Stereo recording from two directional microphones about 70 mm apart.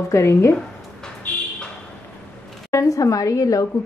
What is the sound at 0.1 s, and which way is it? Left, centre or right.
Speech, left.